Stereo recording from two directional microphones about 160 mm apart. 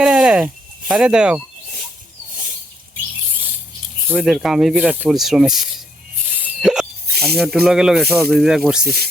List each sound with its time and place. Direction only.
0.0 s a sound: 5° right (ahead or behind)
4.2 s speech: 5° right (ahead or behind)
6.6 s music: 5° right (ahead or behind)
7.1 s snake: 80° right
7.6 s speech: 5° right (ahead or behind)